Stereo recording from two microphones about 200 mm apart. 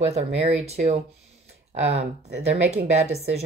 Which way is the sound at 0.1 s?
30° right (ahead or behind).